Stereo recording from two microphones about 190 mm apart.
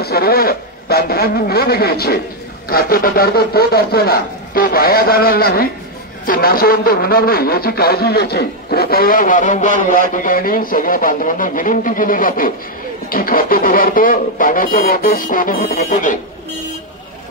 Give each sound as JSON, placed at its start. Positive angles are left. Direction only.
{"t": 0.0, "sound": "a man's voice", "side_deg": 55}